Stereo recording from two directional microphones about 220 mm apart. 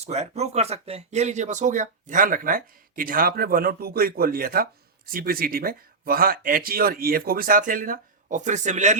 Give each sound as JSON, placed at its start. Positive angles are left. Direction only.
{"t": 0.0, "sound": "speech", "side_deg": -30}